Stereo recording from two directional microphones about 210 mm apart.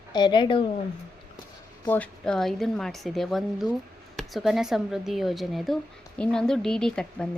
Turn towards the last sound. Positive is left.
turn(degrees=5)  # may be behind; listen again after turning